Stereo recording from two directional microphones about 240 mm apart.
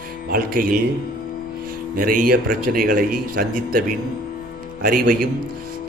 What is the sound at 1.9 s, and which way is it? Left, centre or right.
A man's voice, right.